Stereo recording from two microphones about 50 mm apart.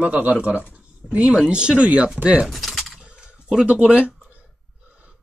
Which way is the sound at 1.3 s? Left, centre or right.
Centre.